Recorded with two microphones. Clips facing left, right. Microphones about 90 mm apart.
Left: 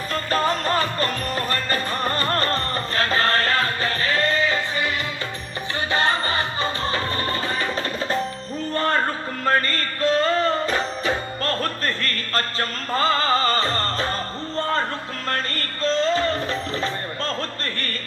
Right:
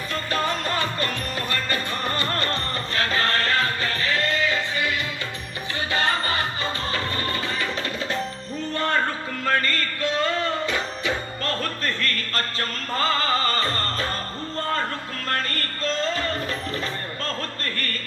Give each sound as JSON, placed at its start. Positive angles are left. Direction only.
{"t": 0.1, "sound": "music", "side_deg": 40}
{"t": 5.9, "sound": "music", "side_deg": 30}
{"t": 15.8, "sound": "music", "side_deg": 30}